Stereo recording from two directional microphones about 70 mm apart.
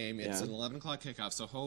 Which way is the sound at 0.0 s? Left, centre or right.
Right.